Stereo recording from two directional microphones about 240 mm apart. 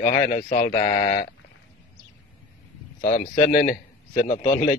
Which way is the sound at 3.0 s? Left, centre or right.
Left.